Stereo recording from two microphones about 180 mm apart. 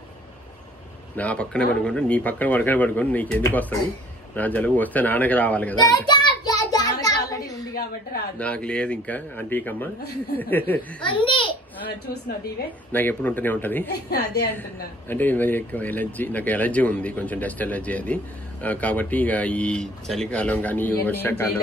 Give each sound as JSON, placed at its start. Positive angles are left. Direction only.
{"t": 1.1, "sound": "speech", "side_deg": 5}
{"t": 5.8, "sound": "child singing", "side_deg": 25}
{"t": 7.2, "sound": "a sound", "side_deg": 20}
{"t": 8.4, "sound": "speech", "side_deg": 5}
{"t": 11.1, "sound": "a child's voice", "side_deg": 30}
{"t": 12.9, "sound": "speech", "side_deg": 10}
{"t": 14.1, "sound": "a woman's voice", "side_deg": 65}
{"t": 15.0, "sound": "speech", "side_deg": 10}